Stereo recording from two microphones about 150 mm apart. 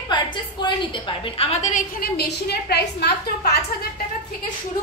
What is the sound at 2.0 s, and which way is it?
A woman's voice, 90° left.